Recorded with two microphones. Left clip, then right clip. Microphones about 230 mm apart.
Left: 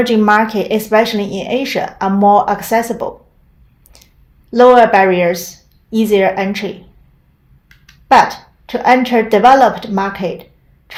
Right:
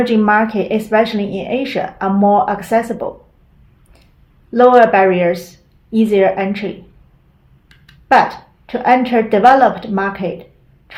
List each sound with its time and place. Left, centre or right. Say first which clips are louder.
0.0 s speech: left 2 dB; left
4.5 s speech: left 2 dB; left
8.0 s speech: left 2 dB; left